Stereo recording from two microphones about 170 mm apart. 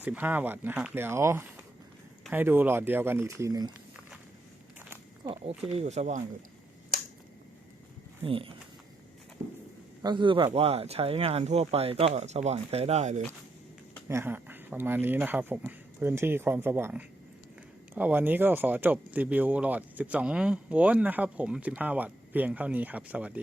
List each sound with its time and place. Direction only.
0.0 s speech: 10° right (ahead or behind)
5.3 s speech: 35° right (ahead or behind)
8.2 s speech: 30° right (ahead or behind)
10.0 s speech: 25° right (ahead or behind)
14.1 s speech: 15° right (ahead or behind)